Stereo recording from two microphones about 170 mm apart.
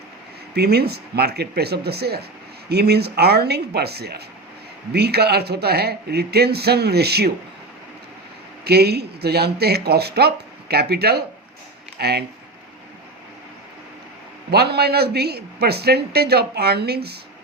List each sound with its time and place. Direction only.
0.5 s speech: 70° right (ahead or behind)
8.6 s speech: 70° right (ahead or behind)
14.5 s speech: 70° right (ahead or behind)